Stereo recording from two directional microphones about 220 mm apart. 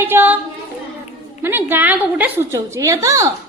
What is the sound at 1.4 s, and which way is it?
A woman's voice, 10° right (ahead or behind).